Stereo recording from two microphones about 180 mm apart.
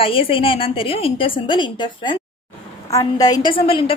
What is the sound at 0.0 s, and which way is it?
A woman's voice, 30° left (ahead or behind).